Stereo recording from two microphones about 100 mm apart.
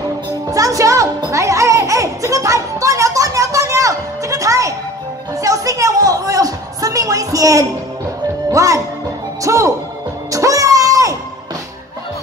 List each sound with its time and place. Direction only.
0.5 s music: 35° right (ahead or behind)
8.5 s speech: 35° right (ahead or behind)
10.3 s music: 35° right (ahead or behind)